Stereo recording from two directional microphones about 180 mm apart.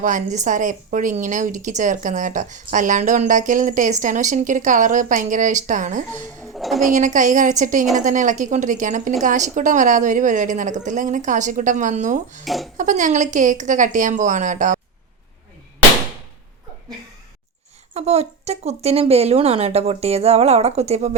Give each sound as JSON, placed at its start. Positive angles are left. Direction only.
{"t": 0.0, "sound": "a woman's voice", "side_deg": -45}
{"t": 6.5, "sound": "a sound", "side_deg": 0}
{"t": 6.9, "sound": "a woman's voice", "side_deg": -45}
{"t": 12.5, "sound": "a child's voice", "side_deg": 0}
{"t": 12.7, "sound": "a woman's voice", "side_deg": -45}
{"t": 17.9, "sound": "a woman's voice", "side_deg": -35}